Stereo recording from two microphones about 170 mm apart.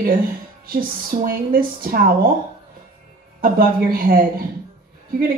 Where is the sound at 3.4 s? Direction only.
55° right (ahead or behind).